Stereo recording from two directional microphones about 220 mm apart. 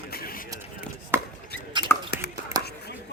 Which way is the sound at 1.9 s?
10° left (ahead or behind).